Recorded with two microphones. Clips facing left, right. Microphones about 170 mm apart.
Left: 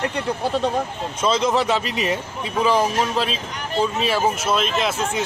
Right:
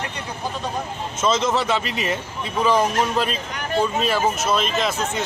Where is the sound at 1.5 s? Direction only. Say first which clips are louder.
Left 2 dB; 15° left (ahead or behind).